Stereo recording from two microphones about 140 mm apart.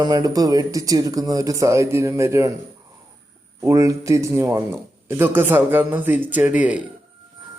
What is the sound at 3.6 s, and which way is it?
A man's voice, 20° right (ahead or behind).